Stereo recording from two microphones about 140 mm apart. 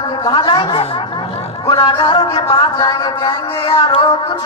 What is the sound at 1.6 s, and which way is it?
Speech, 35° left (ahead or behind).